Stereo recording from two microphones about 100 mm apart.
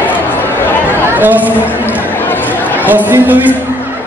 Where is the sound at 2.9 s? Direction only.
20° right (ahead or behind).